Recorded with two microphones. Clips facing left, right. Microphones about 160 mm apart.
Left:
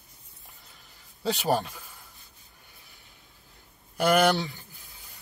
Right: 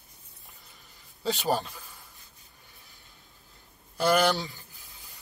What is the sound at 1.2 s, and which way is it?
Speech, 10° left (ahead or behind).